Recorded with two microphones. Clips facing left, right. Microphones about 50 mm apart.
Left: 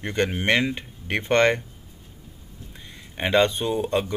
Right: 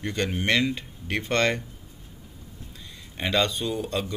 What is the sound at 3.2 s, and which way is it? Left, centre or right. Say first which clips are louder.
Speech: left 5 dB; left.